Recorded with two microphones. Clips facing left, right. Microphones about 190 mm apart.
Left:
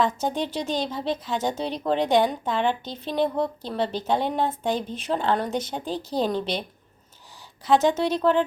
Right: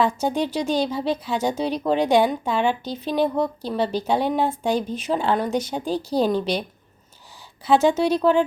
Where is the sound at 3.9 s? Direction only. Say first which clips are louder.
Right 5 dB; 25° left (ahead or behind).